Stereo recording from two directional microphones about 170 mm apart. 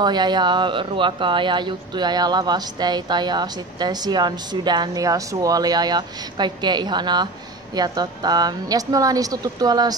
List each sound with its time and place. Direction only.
0.0 s speech: 25° right (ahead or behind)